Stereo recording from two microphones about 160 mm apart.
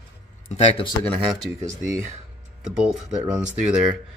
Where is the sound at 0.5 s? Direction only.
45° left (ahead or behind).